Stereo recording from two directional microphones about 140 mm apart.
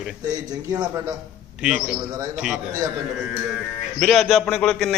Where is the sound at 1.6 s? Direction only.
5° right (ahead or behind).